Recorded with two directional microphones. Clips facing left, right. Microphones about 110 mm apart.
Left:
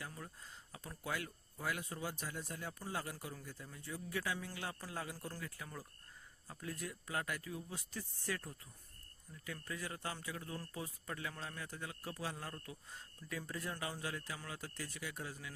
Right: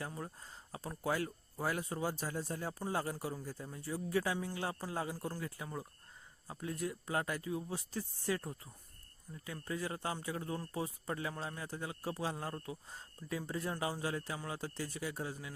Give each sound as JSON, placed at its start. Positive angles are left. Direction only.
{"t": 0.0, "sound": "speech", "side_deg": -35}
{"t": 5.1, "sound": "a man's voice", "side_deg": -15}